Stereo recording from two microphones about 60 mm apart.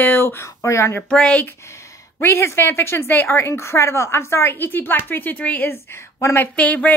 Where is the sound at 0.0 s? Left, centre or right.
Left.